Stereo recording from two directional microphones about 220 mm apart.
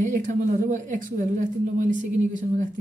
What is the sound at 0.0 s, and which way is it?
Speech, 35° right (ahead or behind).